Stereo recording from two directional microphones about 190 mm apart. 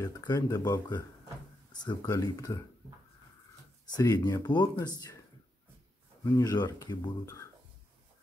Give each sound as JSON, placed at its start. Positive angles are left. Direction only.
{"t": 0.0, "sound": "speech", "side_deg": 20}
{"t": 3.9, "sound": "speech", "side_deg": 20}
{"t": 6.2, "sound": "speech", "side_deg": 20}